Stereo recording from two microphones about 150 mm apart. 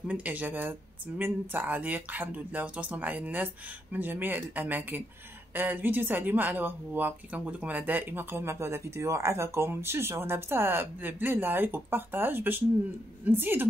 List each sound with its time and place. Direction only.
0.1 s speech: 10° right (ahead or behind)